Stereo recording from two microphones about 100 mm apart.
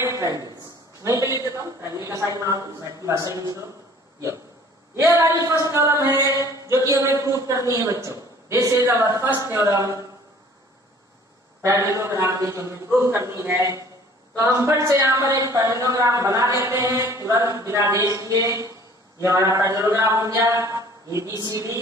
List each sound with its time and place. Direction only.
0.0 s a sound: 30° right (ahead or behind)
1.0 s a man's voice: 30° right (ahead or behind)
4.9 s a man's voice: 30° right (ahead or behind)
11.6 s a man's voice: 30° right (ahead or behind)